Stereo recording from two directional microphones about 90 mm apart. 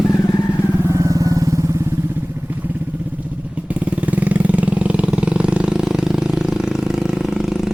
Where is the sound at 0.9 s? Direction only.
35° right (ahead or behind).